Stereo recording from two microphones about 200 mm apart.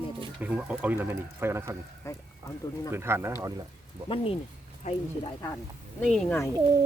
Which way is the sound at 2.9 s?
10° right (ahead or behind).